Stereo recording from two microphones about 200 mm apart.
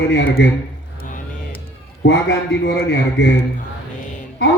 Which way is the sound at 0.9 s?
40° left (ahead or behind).